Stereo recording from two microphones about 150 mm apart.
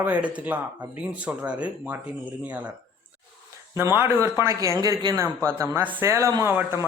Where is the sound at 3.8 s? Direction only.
15° right (ahead or behind).